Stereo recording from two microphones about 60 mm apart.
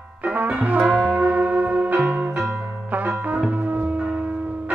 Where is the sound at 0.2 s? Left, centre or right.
Right.